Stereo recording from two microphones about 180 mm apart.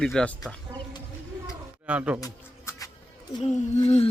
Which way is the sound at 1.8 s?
5° right (ahead or behind).